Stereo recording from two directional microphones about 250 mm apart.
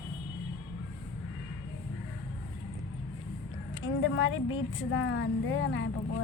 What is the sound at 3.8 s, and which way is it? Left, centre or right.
Speech, left.